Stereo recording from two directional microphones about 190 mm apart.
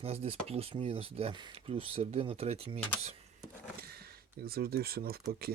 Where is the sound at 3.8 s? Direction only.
55° right (ahead or behind).